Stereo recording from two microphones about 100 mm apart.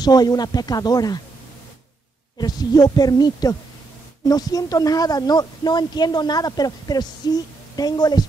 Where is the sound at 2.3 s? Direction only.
40° left (ahead or behind).